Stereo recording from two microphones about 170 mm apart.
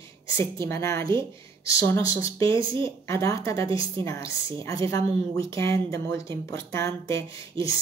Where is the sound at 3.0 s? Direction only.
15° left (ahead or behind).